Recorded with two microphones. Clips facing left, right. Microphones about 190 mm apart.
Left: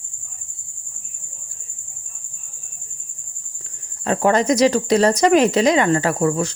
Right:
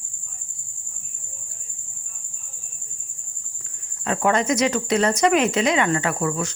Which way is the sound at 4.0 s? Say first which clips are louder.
Left 4 dB; 35° left (ahead or behind).